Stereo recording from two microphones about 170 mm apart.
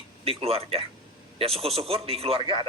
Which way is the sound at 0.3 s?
35° right (ahead or behind).